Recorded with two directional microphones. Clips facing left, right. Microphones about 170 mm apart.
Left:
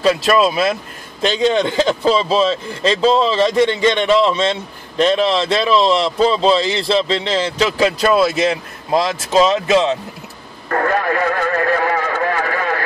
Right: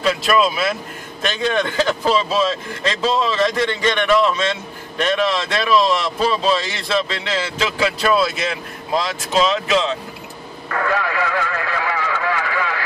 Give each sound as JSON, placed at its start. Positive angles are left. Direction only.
{"t": 0.0, "sound": "speech", "side_deg": 35}
{"t": 1.2, "sound": "speech", "side_deg": 20}
{"t": 10.7, "sound": "radio", "side_deg": 45}